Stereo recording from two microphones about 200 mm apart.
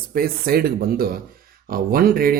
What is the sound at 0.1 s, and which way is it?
Speech, 50° right (ahead or behind).